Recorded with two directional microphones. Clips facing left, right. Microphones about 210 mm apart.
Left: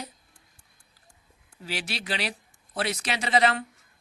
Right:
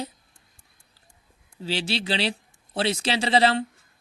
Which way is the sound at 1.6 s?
30° right (ahead or behind).